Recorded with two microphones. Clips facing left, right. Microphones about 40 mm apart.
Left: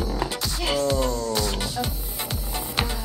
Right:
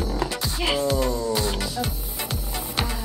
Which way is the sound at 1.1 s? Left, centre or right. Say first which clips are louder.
Right 1 dB; centre.